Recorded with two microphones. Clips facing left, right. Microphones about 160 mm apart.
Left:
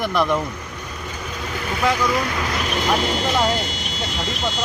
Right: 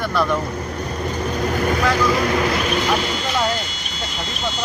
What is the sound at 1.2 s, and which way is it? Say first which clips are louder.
Vehicle: right 9 dB; 55° right (ahead or behind).